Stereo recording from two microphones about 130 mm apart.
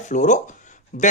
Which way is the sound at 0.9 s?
80° left.